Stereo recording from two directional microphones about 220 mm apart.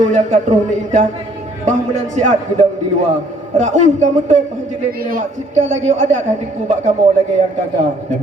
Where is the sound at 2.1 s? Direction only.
35° right (ahead or behind).